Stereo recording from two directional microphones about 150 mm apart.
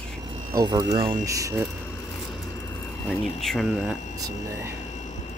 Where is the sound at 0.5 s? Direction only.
25° right (ahead or behind).